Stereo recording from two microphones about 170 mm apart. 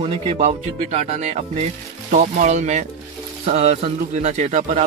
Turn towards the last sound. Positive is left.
turn(degrees=-45)  # may be behind; listen again after turning